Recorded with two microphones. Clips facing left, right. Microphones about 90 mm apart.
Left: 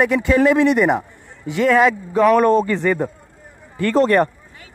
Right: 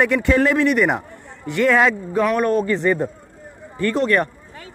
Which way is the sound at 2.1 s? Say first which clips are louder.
Left 6 dB; 20° left (ahead or behind).